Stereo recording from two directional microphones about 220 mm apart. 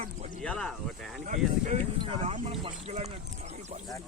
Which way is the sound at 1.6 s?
30° right (ahead or behind).